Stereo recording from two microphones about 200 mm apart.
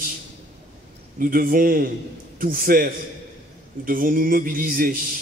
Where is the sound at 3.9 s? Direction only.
45° right (ahead or behind).